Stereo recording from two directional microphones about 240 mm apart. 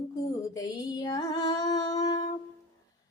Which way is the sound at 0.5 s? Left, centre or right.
Centre.